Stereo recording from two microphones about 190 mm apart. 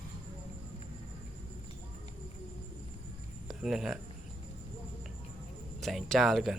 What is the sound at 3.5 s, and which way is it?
Speech, centre (ahead or behind).